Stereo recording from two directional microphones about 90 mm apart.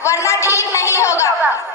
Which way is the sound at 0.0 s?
35° left (ahead or behind).